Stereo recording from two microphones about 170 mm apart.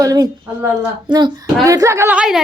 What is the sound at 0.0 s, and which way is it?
A woman's voice, 20° right (ahead or behind).